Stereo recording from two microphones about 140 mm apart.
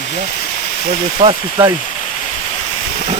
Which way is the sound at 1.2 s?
40° right (ahead or behind).